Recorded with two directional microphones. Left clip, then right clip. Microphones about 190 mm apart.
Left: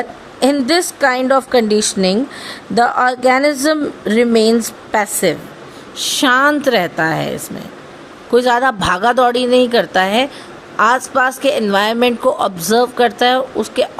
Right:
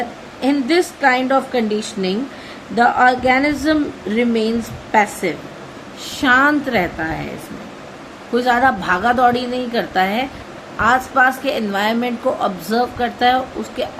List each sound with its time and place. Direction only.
0.3 s a woman's voice: 60° left (ahead or behind)
8.3 s a woman's voice: 60° left (ahead or behind)